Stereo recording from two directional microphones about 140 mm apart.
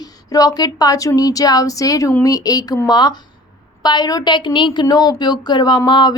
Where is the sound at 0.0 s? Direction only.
25° left (ahead or behind).